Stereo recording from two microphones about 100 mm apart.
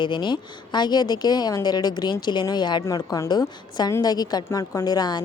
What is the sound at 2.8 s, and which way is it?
A woman's voice, 35° left (ahead or behind).